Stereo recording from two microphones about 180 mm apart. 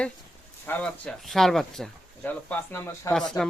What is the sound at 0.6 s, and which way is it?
Speech, 10° left (ahead or behind).